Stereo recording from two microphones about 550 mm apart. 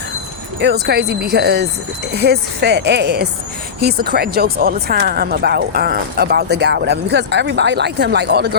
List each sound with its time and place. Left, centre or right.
0.6 s speech: centre